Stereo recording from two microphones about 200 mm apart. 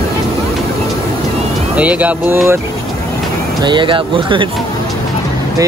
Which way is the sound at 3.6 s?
25° right (ahead or behind).